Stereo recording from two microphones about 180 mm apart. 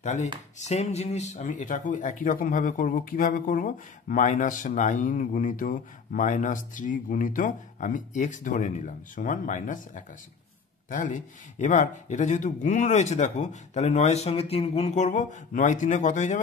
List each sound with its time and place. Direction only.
0.0 s speech: 40° left (ahead or behind)